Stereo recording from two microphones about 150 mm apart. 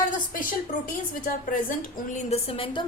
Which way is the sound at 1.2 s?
65° left (ahead or behind).